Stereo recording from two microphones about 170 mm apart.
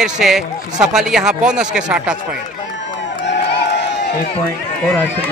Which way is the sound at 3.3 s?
90° left.